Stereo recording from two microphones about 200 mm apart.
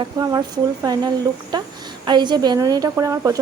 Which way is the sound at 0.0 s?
20° right (ahead or behind).